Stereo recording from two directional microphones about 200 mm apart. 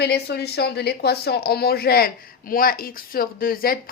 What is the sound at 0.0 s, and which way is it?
Speech, 55° left (ahead or behind).